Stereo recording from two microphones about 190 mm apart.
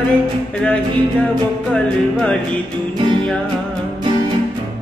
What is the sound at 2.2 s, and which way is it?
Music, 5° left (ahead or behind).